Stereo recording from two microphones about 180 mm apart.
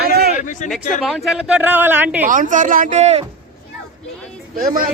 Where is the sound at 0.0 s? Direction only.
60° right (ahead or behind).